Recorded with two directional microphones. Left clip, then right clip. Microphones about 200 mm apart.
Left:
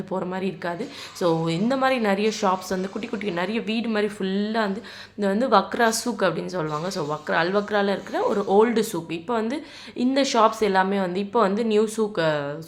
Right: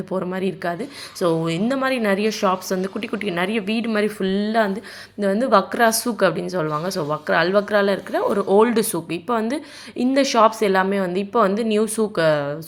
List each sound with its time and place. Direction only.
0.1 s a woman's voice: 15° right (ahead or behind)